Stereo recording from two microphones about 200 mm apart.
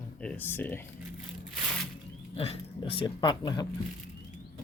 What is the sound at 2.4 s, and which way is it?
Speech, 30° left (ahead or behind).